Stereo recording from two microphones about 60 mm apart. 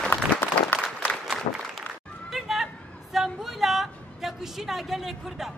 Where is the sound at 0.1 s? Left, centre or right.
Left.